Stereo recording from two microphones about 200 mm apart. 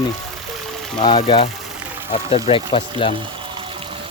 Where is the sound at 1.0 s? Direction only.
20° left (ahead or behind).